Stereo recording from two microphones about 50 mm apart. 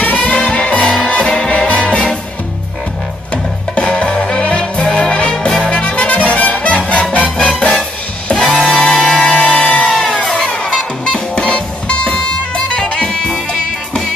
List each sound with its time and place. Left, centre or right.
0.0 s music: left
3.7 s music: centre
8.5 s music: centre